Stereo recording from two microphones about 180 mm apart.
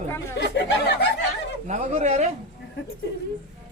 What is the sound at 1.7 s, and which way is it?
Speech, 40° right (ahead or behind).